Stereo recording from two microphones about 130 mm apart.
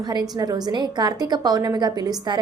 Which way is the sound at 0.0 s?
30° right (ahead or behind).